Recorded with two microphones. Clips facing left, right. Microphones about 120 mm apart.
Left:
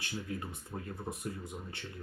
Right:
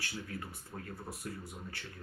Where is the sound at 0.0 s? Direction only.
20° left (ahead or behind).